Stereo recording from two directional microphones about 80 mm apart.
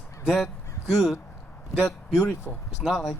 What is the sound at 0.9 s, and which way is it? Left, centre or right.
Speech, centre.